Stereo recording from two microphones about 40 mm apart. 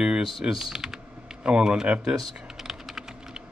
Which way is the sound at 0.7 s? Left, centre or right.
Centre.